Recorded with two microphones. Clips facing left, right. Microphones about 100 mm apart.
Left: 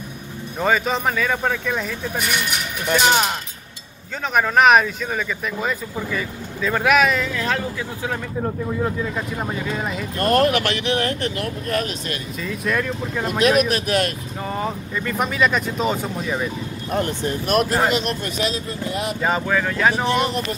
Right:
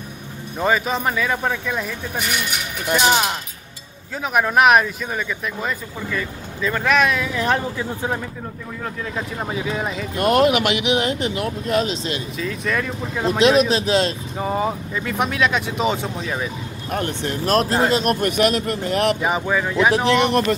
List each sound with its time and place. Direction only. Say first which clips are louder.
0.6 s speech: even; 5° right (ahead or behind)
2.9 s speech: even; 5° right (ahead or behind)
4.3 s speech: even; 5° right (ahead or behind)
7.3 s speech: right 3 dB; 20° right (ahead or behind)
9.0 s speech: left 1 dB; centre (ahead or behind)
10.1 s speech: right 2 dB; 15° right (ahead or behind)
12.4 s speech: left 2 dB; centre (ahead or behind)
13.2 s speech: right 2 dB; 25° right (ahead or behind)
14.4 s speech: right 4 dB; 10° right (ahead or behind)
17.5 s speech: right 1 dB; 30° right (ahead or behind)
18.0 s speech: right 6 dB; 60° right (ahead or behind)
19.2 s speech: even; 10° right (ahead or behind)
20.1 s speech: right 4 dB; 80° right